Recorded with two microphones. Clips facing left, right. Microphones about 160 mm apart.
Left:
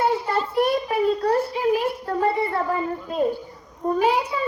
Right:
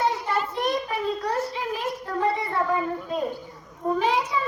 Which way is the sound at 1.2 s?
30° left (ahead or behind).